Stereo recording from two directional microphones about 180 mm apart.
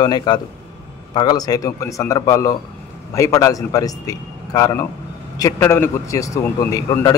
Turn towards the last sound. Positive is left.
turn(degrees=20)  # may be behind; listen again after turning